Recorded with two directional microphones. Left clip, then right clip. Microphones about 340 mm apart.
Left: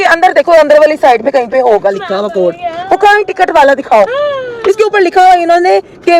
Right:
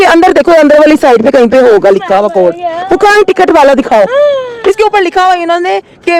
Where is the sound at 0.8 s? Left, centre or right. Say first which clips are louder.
Right 2 dB; right.